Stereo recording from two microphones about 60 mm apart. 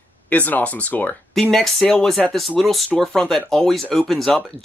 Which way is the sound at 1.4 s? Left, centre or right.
Centre.